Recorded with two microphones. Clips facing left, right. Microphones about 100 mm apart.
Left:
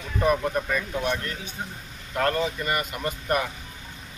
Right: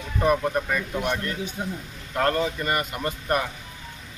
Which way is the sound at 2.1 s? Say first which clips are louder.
Right 1 dB; 30° right (ahead or behind).